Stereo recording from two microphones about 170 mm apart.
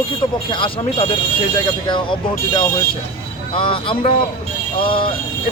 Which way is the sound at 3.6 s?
30° left (ahead or behind).